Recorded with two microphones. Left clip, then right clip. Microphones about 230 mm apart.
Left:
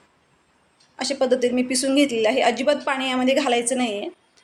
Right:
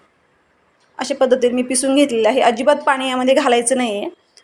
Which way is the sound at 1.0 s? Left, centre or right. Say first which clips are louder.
Right 5 dB; centre.